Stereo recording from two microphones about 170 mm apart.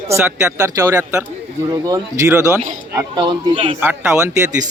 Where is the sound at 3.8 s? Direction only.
15° right (ahead or behind).